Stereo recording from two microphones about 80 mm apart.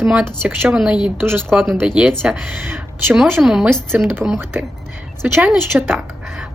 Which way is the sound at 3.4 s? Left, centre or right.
Centre.